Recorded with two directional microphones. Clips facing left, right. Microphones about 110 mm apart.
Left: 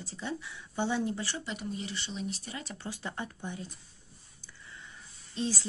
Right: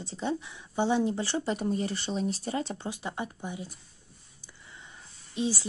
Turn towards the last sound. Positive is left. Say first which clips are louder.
# right 3 dB
turn(degrees=-15)  # may be behind; listen again after turning